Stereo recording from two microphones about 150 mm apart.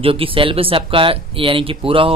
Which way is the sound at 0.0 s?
35° right (ahead or behind).